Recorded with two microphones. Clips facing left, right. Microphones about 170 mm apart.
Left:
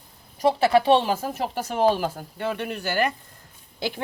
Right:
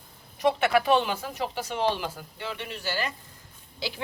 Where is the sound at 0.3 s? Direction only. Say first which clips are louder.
Left 4 dB; 35° left (ahead or behind).